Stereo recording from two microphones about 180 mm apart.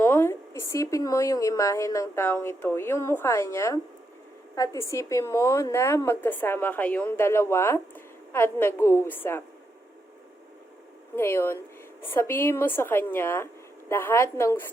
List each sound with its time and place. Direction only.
0.0 s a woman's voice: 10° left (ahead or behind)
11.1 s a woman's voice: 15° left (ahead or behind)